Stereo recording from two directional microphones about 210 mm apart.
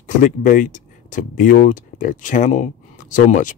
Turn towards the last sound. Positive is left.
turn(degrees=35)  # may be behind; listen again after turning